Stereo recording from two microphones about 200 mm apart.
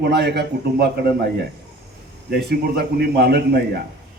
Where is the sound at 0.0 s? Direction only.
55° right (ahead or behind).